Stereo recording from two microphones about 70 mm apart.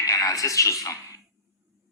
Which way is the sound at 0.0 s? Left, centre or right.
Left.